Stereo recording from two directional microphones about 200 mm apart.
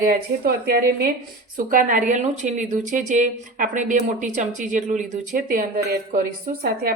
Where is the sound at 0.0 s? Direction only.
50° right (ahead or behind).